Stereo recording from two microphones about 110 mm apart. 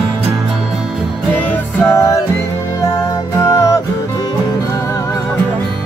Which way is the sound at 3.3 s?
30° left (ahead or behind).